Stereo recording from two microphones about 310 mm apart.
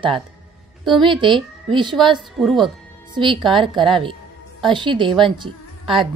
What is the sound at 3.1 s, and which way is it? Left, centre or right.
A woman's voice, centre.